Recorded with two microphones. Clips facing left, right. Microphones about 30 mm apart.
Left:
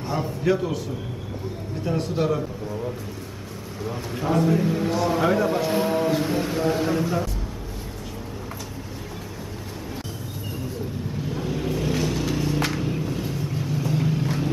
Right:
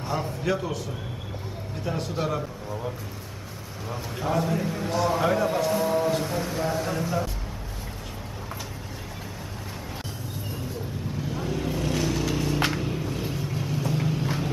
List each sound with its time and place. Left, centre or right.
0.0 s a man's voice: centre
1.9 s a man's voice: centre
3.8 s a man's voice: centre
5.7 s a man's voice: left; by 7.2 s centre
11.3 s vehicle: centre